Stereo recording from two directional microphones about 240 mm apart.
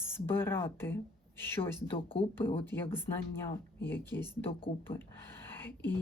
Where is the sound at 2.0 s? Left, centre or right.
Left.